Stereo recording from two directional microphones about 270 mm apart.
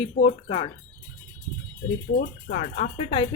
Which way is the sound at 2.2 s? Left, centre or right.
Left.